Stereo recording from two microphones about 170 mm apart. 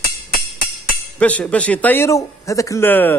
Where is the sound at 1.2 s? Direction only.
10° left (ahead or behind).